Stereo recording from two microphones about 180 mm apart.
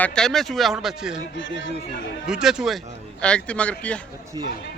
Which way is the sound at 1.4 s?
90° left.